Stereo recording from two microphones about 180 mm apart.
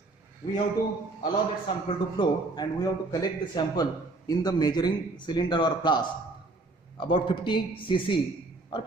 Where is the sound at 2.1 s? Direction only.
20° left (ahead or behind).